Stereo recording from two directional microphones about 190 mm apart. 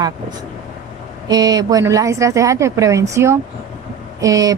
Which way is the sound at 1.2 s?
20° right (ahead or behind).